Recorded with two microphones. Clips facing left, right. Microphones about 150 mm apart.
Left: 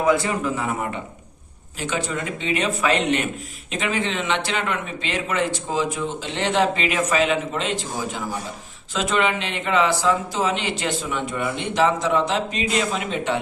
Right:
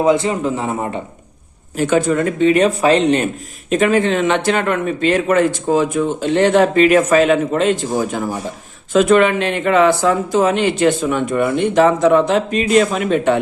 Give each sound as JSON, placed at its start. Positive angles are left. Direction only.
{"t": 0.0, "sound": "a man's voice", "side_deg": -20}
{"t": 1.8, "sound": "speech", "side_deg": -50}
{"t": 3.7, "sound": "speech", "side_deg": -50}